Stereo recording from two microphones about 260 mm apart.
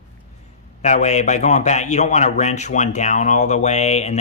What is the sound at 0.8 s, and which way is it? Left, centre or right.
A man's voice, left.